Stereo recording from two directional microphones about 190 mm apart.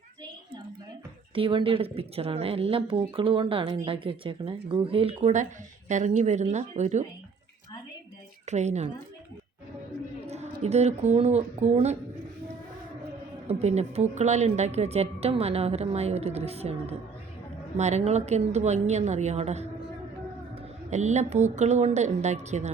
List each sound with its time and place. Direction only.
1.4 s a woman's voice: 25° right (ahead or behind)
8.4 s a woman's voice: 35° right (ahead or behind)
10.2 s speech: 35° right (ahead or behind)
13.5 s a woman's voice: 35° right (ahead or behind)
20.9 s a woman's voice: 35° right (ahead or behind)